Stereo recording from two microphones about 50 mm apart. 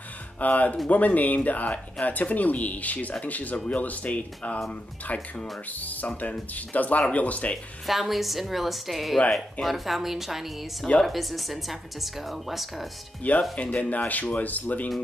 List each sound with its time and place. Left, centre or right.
0.4 s speech: left
5.7 s speech: left
7.8 s speech: centre
13.2 s speech: left